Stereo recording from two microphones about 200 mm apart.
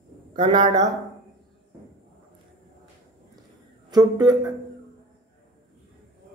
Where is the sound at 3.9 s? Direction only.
20° right (ahead or behind).